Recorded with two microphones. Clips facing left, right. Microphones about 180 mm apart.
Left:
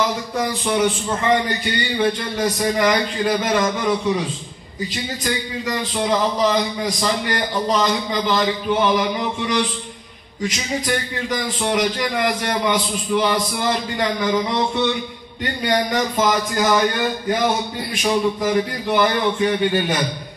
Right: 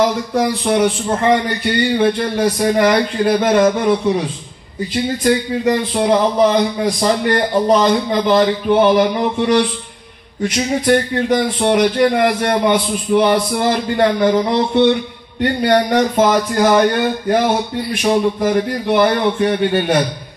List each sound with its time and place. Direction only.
0.4 s a man's voice: 60° right (ahead or behind)
4.9 s a man's voice: 55° right (ahead or behind)